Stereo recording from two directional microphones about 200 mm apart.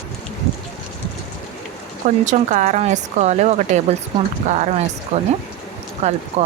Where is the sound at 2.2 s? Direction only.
40° right (ahead or behind).